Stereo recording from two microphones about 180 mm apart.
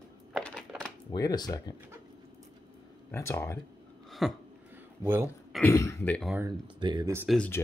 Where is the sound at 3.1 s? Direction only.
15° left (ahead or behind).